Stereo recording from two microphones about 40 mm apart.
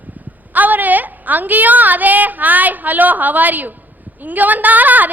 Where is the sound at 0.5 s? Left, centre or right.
Right.